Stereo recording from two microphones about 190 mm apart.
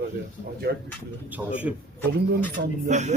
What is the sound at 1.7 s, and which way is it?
Speech, 10° right (ahead or behind).